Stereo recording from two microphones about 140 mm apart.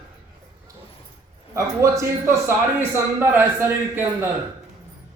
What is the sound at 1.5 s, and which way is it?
A man's voice, 20° right (ahead or behind).